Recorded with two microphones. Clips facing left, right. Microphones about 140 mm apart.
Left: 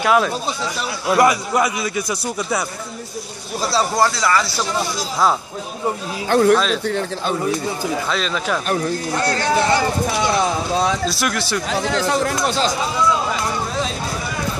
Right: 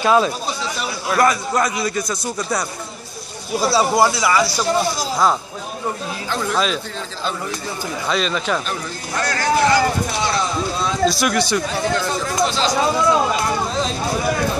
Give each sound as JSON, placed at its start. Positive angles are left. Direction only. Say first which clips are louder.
{"t": 0.0, "sound": "speech", "louder": "right 1 dB", "side_deg": 0}
{"t": 1.1, "sound": "a man's voice", "louder": "left 2 dB", "side_deg": 15}
{"t": 3.7, "sound": "speech", "louder": "right 1 dB", "side_deg": -10}
{"t": 6.2, "sound": "speech", "louder": "left 7 dB", "side_deg": 60}
{"t": 8.1, "sound": "speech", "louder": "right 1 dB", "side_deg": 0}
{"t": 9.2, "sound": "speech", "louder": "right 2 dB", "side_deg": 30}
{"t": 11.1, "sound": "speech", "louder": "right 4 dB", "side_deg": 5}
{"t": 11.6, "sound": "speech", "louder": "left 1 dB", "side_deg": 80}